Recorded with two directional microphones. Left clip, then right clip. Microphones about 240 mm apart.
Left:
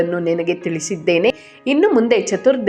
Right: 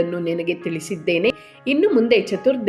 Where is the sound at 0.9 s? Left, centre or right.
Left.